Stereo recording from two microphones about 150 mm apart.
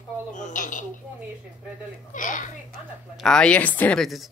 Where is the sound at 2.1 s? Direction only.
60° left (ahead or behind).